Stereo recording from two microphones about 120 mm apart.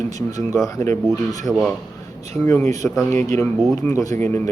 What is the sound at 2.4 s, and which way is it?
A man's voice, 20° left (ahead or behind).